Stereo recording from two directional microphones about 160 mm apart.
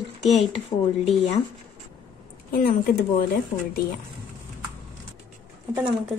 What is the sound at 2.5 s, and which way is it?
Speech, 65° left (ahead or behind).